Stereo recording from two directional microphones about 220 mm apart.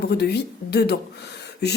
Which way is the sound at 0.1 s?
50° left (ahead or behind).